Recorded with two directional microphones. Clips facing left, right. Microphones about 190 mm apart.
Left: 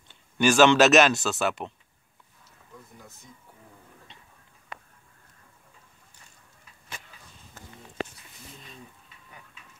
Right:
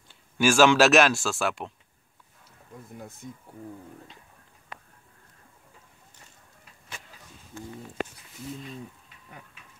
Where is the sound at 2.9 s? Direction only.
55° right (ahead or behind).